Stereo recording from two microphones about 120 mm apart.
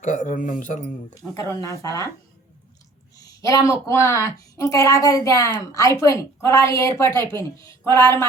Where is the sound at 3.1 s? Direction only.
30° left (ahead or behind).